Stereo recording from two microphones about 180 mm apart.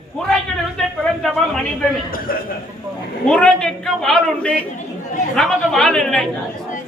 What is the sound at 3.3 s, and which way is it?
A man's voice, 5° left (ahead or behind).